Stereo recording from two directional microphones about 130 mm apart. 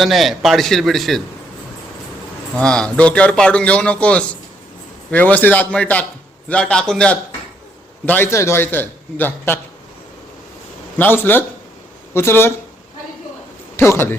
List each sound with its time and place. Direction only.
0.0 s a man's voice: centre (ahead or behind)
2.6 s a man's voice: 5° left (ahead or behind)
10.9 s a man's voice: 15° left (ahead or behind)
13.7 s a man's voice: 20° left (ahead or behind)